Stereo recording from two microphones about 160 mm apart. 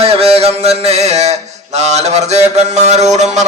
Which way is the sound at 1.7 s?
45° right (ahead or behind).